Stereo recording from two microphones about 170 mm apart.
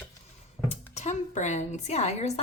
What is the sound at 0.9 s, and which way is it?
A woman's voice, 45° left (ahead or behind).